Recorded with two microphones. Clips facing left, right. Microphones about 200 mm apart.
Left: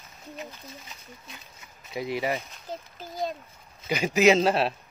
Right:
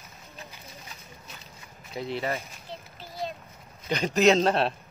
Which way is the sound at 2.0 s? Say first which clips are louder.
Left 2 dB; 10° left (ahead or behind).